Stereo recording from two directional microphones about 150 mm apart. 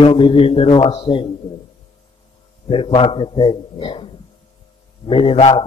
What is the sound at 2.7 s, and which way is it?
A man's voice, 35° left (ahead or behind).